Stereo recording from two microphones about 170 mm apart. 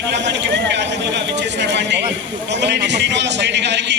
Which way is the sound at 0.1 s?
90° right.